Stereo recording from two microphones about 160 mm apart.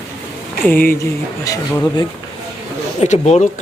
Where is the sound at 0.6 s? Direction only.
10° left (ahead or behind).